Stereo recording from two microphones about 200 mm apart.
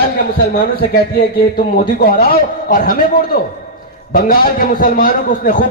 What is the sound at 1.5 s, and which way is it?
A man's voice, 45° left (ahead or behind).